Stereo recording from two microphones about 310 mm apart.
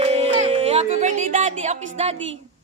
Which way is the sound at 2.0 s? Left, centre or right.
Right.